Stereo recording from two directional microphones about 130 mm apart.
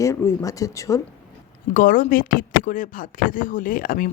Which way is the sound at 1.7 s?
90° left.